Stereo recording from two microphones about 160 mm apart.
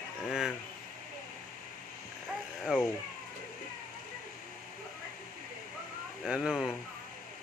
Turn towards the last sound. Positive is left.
turn(degrees=-5)  # may be behind; listen again after turning